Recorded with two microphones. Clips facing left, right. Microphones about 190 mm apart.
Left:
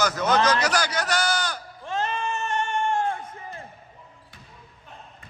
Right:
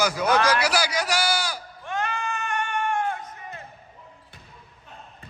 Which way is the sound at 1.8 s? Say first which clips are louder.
Left 1 dB; 25° left (ahead or behind).